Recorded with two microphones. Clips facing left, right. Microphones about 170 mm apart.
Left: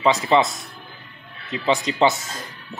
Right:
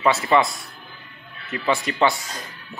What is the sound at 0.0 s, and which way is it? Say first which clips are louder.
Speech: left 1 dB; 20° left (ahead or behind).